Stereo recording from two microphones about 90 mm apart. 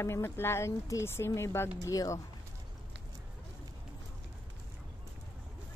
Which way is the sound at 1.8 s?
40° left (ahead or behind).